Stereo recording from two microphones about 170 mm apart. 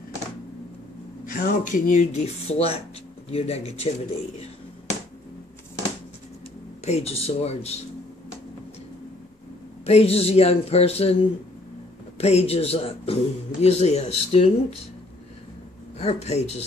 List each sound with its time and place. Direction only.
1.2 s speech: 50° left (ahead or behind)
6.8 s speech: 40° left (ahead or behind)
9.8 s speech: 35° left (ahead or behind)
12.2 s speech: 40° left (ahead or behind)
16.0 s speech: 40° left (ahead or behind)